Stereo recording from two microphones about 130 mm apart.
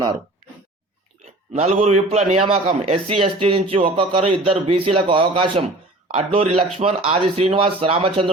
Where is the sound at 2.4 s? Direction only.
40° right (ahead or behind).